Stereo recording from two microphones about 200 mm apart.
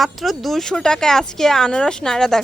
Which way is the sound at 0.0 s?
Centre (ahead or behind).